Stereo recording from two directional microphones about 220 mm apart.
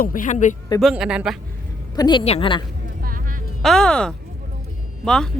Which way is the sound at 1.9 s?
20° left (ahead or behind).